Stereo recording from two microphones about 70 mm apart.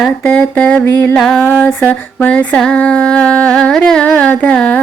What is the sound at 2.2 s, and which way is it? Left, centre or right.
Music, left.